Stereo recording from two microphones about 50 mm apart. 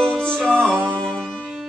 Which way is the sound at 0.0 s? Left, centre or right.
Centre.